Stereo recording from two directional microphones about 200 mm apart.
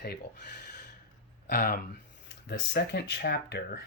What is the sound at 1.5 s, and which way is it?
Speech, 50° left (ahead or behind).